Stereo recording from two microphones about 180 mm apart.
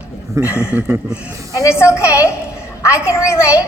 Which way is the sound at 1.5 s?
15° left (ahead or behind).